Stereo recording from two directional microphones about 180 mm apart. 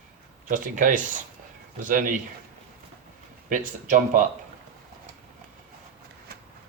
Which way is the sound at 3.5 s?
45° right (ahead or behind).